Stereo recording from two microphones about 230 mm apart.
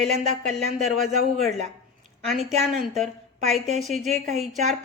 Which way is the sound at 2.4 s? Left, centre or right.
Right.